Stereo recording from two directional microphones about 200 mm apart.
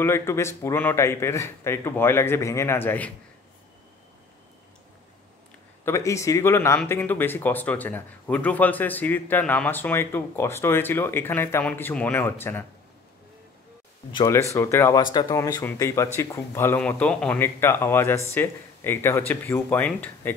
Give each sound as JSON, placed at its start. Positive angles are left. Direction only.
{"t": 0.0, "sound": "speech", "side_deg": 15}
{"t": 5.9, "sound": "speech", "side_deg": 15}
{"t": 14.1, "sound": "speech", "side_deg": 15}